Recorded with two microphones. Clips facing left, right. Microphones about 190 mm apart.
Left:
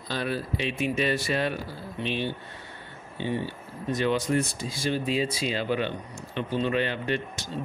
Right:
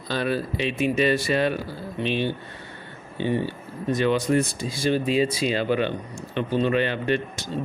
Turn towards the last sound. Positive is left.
turn(degrees=-60)  # may be behind; listen again after turning